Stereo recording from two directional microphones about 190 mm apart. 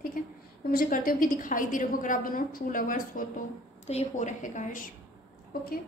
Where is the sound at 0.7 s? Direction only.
50° left (ahead or behind).